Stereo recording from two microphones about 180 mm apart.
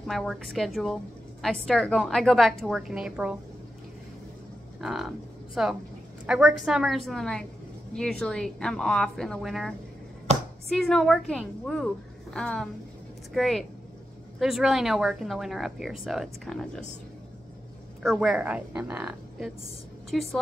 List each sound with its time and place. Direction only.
0.0 s speech: centre (ahead or behind)
4.7 s speech: centre (ahead or behind)
10.3 s a sound: 40° right (ahead or behind)
10.7 s speech: centre (ahead or behind)
18.0 s a woman's voice: centre (ahead or behind)